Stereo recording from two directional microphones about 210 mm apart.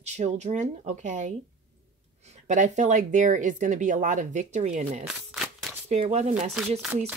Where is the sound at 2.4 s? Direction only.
35° right (ahead or behind).